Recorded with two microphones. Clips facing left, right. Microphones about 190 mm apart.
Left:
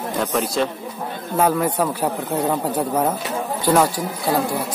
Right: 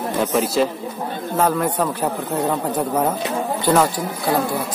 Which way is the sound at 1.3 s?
10° left (ahead or behind).